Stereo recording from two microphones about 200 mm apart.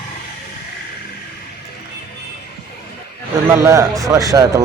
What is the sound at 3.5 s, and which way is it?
A man's voice, 15° right (ahead or behind).